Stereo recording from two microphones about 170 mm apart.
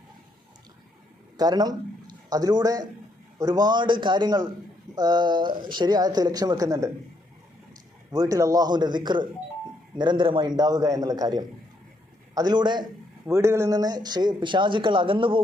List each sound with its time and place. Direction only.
1.4 s a man's voice: 25° right (ahead or behind)
8.1 s speech: 20° right (ahead or behind)
13.2 s speech: 15° right (ahead or behind)